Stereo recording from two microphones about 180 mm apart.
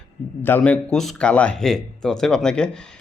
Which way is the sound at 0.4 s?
10° left (ahead or behind).